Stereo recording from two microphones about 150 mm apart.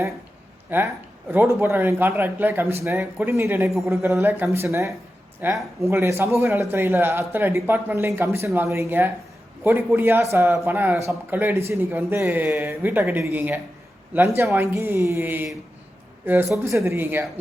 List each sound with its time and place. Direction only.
0.7 s speech: 15° right (ahead or behind)